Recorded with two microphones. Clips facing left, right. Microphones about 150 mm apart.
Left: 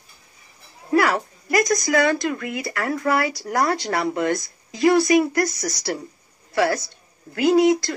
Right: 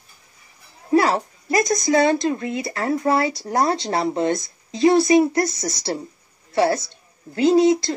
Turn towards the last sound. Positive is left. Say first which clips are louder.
# right 1 dB
turn(degrees=-25)  # may be behind; listen again after turning